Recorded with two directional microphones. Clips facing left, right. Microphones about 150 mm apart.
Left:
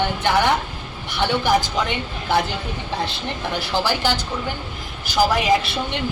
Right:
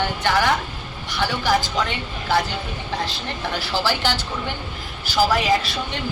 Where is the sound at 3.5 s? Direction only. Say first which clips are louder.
Left 1 dB; 20° left (ahead or behind).